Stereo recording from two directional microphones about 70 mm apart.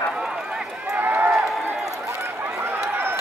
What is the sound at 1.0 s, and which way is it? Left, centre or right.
Run, right.